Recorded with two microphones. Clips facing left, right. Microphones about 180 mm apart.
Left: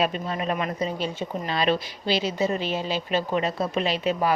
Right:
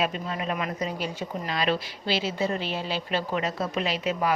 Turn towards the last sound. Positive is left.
turn(degrees=30)  # may be behind; listen again after turning